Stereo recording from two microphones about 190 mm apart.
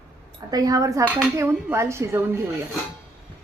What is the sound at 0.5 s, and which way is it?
A woman's voice, 20° right (ahead or behind).